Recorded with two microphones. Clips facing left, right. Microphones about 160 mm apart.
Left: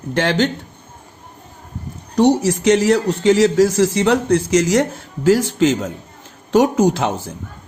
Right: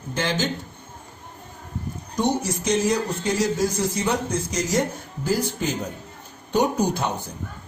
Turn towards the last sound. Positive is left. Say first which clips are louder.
# left 7 dB
turn(degrees=90)